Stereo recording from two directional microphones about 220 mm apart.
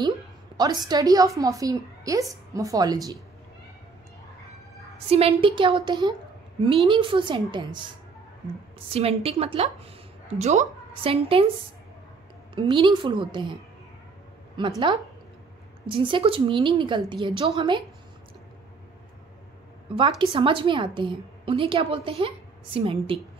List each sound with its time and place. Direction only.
0.6 s a woman's voice: 20° right (ahead or behind)
5.1 s a woman's voice: 25° right (ahead or behind)
8.9 s a woman's voice: 25° right (ahead or behind)
12.5 s a woman's voice: 20° right (ahead or behind)
14.6 s a woman's voice: 20° right (ahead or behind)
15.9 s a woman's voice: 20° right (ahead or behind)
20.0 s a woman's voice: 25° right (ahead or behind)